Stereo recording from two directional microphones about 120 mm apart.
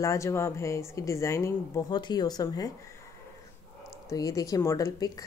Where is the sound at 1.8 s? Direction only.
40° left (ahead or behind).